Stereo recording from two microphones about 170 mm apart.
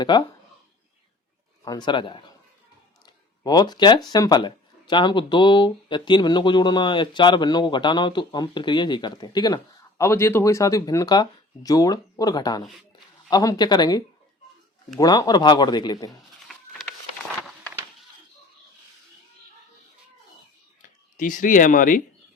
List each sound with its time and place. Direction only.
0.0 s speech: 25° left (ahead or behind)
1.6 s speech: 25° left (ahead or behind)
3.4 s speech: 25° left (ahead or behind)
21.2 s speech: 50° left (ahead or behind)